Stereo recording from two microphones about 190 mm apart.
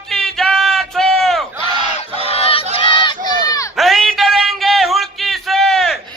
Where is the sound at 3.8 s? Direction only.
Centre (ahead or behind).